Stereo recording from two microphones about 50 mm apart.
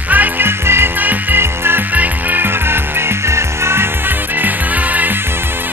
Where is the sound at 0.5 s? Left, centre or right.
Right.